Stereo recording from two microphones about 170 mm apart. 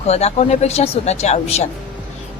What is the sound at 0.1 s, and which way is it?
Speech, 40° left (ahead or behind).